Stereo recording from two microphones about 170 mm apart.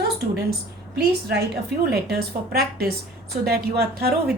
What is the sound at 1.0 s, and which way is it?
A woman's voice, 75° right (ahead or behind).